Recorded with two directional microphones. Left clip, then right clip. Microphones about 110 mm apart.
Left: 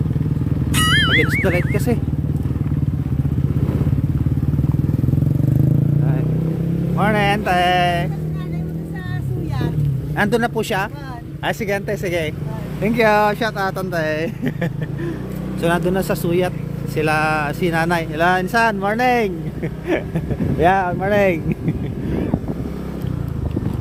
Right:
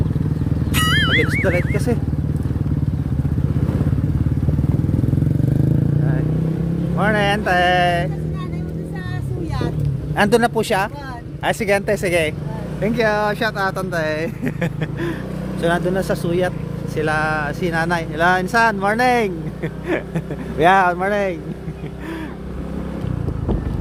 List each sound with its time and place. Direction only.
0.8 s vehicle: centre (ahead or behind)
1.5 s speech: 20° left (ahead or behind)
6.9 s speech: 15° left (ahead or behind)
10.2 s speech: 20° right (ahead or behind)
12.8 s speech: 30° left (ahead or behind)
13.4 s speech: 15° left (ahead or behind)
21.1 s speech: 30° left (ahead or behind)